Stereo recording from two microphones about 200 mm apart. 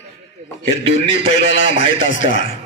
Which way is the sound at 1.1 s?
70° left (ahead or behind).